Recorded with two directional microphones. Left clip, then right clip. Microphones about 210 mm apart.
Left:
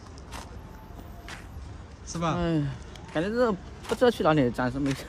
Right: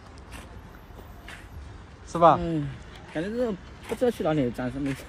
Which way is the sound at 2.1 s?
5° right (ahead or behind).